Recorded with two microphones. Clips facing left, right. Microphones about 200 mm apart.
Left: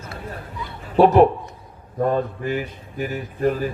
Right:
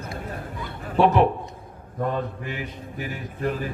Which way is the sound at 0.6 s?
50° right (ahead or behind).